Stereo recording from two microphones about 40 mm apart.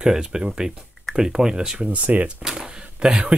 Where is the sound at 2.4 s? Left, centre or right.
Centre.